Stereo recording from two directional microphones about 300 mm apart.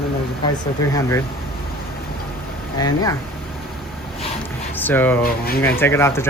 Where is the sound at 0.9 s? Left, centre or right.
Centre.